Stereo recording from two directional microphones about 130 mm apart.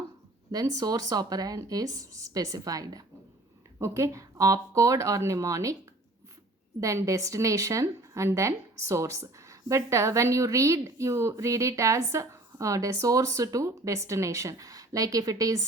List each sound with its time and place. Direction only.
0.5 s a woman's voice: 30° right (ahead or behind)
6.7 s a woman's voice: 25° right (ahead or behind)